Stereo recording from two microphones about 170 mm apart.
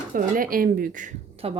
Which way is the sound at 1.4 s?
35° right (ahead or behind).